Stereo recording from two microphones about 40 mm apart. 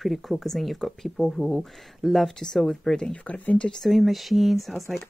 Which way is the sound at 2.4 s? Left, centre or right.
Centre.